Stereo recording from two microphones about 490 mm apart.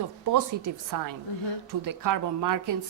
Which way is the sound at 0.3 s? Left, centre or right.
Right.